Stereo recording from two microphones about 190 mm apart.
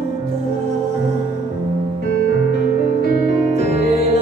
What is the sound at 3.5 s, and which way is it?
Music, 35° right (ahead or behind).